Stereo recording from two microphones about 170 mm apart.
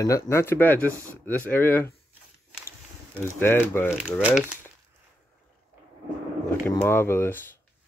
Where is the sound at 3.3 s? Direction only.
10° left (ahead or behind).